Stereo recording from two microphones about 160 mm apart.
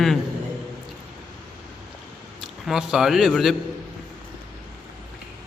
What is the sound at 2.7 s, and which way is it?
Speech, 5° right (ahead or behind).